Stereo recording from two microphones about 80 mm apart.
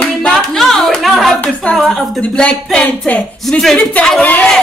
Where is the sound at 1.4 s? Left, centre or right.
Centre.